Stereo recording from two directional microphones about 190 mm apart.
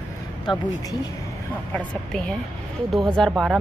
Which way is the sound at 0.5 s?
25° left (ahead or behind).